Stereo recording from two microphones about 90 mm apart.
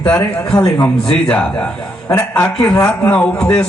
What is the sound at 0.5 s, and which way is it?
Speech, 45° left (ahead or behind).